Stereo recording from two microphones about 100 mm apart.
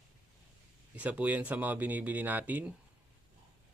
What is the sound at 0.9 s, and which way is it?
Speech, 15° right (ahead or behind).